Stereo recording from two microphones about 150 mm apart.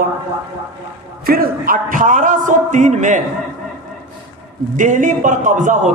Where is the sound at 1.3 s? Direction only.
75° right (ahead or behind); by 3.2 s 55° right (ahead or behind).